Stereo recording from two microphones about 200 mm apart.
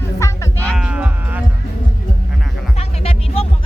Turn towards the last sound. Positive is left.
turn(degrees=30)  # may be behind; listen again after turning